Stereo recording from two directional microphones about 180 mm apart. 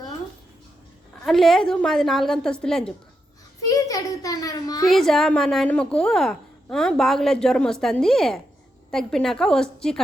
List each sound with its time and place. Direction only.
1.2 s a woman's voice: centre (ahead or behind)
3.7 s a child's voice: 20° left (ahead or behind)
4.9 s a woman's voice: centre (ahead or behind)